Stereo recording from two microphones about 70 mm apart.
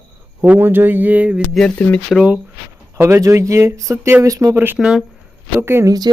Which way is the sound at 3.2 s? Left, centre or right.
Right.